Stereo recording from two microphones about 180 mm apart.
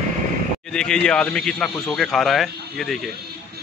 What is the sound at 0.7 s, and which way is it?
Speech, 5° left (ahead or behind).